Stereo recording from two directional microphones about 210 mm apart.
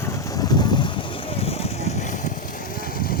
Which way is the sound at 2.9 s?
45° left (ahead or behind).